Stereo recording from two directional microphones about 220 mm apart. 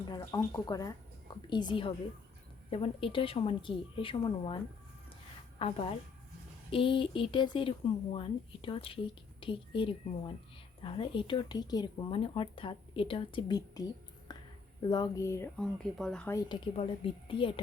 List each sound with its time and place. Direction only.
0.1 s speech: 15° left (ahead or behind)
14.3 s a sound: 20° left (ahead or behind)
14.8 s speech: 20° left (ahead or behind)
15.6 s speech: centre (ahead or behind); by 17.5 s 25° left (ahead or behind)